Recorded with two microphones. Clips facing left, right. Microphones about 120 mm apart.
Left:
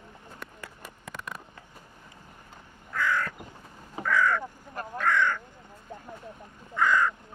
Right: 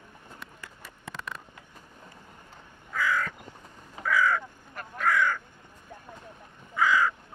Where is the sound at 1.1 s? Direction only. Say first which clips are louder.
Even; 10° left (ahead or behind).